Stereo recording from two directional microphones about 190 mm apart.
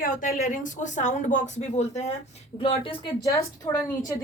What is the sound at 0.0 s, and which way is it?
A woman's voice, 45° left (ahead or behind).